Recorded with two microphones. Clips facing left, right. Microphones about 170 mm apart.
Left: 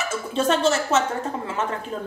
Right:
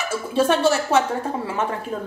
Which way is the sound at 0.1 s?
10° right (ahead or behind).